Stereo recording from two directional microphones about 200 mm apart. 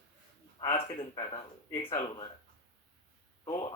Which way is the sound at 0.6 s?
20° left (ahead or behind).